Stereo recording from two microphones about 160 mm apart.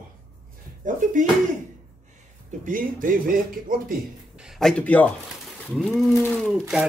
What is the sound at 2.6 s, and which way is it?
Speech, 60° right (ahead or behind).